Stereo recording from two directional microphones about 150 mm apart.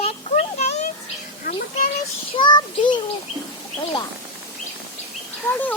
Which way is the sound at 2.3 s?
30° left (ahead or behind).